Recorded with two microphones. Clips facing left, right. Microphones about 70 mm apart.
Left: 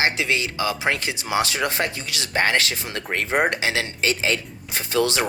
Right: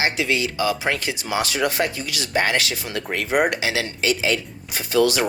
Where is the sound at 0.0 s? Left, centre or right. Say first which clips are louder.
Right 1 dB; left.